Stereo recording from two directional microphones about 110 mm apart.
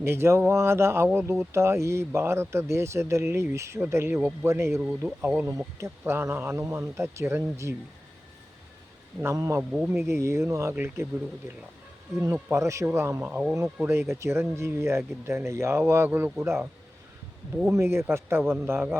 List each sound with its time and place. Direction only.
0.0 s speech: 25° right (ahead or behind)
4.8 s speech: 10° right (ahead or behind)
9.2 s speech: 30° right (ahead or behind)
9.7 s speech: 5° right (ahead or behind)
10.1 s speech: 25° right (ahead or behind)
12.3 s speech: 25° right (ahead or behind)
17.7 s speech: 25° right (ahead or behind)